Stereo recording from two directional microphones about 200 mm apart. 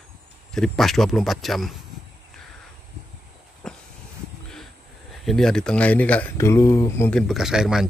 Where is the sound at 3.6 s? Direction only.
5° left (ahead or behind).